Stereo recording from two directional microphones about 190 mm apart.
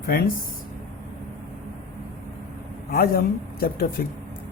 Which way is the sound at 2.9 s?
50° left (ahead or behind).